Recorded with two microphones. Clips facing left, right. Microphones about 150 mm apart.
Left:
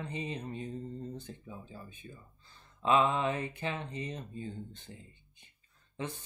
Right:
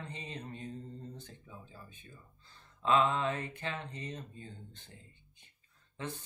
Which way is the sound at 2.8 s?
15° left (ahead or behind).